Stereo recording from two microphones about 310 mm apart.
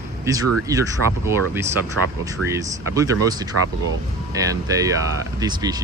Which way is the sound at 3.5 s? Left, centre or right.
Right.